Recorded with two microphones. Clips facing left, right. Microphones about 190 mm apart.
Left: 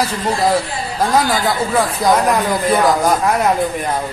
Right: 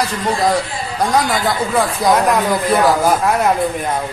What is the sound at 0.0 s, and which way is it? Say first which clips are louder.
Speech: even; centre (ahead or behind).